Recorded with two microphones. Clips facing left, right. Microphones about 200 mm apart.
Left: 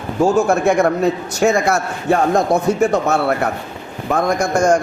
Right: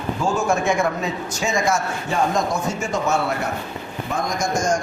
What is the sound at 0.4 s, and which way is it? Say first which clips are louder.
A man's voice: left 5 dB; 65° left (ahead or behind).